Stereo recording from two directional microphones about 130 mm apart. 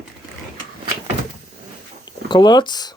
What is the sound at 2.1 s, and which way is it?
Speech, 35° left (ahead or behind).